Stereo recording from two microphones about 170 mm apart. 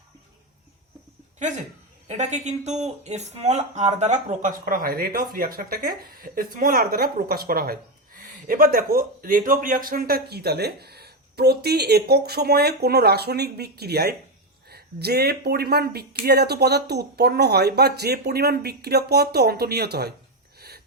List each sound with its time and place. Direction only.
1.4 s speech: 45° right (ahead or behind); by 20.1 s 70° right (ahead or behind)
20.6 s gasp: 70° right (ahead or behind)